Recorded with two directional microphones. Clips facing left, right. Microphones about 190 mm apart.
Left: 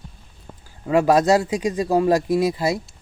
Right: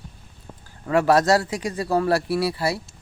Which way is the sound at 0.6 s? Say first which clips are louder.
Left 2 dB; 15° left (ahead or behind).